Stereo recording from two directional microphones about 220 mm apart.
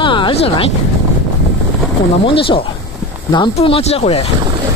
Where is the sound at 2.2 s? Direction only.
25° left (ahead or behind).